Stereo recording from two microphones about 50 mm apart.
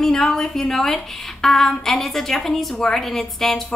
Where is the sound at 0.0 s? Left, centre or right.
Centre.